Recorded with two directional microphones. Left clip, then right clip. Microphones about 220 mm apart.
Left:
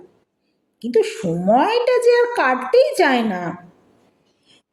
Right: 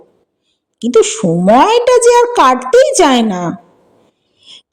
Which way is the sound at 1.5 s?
40° right (ahead or behind).